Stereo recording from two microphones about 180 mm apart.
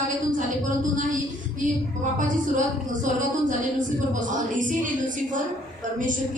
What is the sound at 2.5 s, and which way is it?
A woman's voice, 45° right (ahead or behind).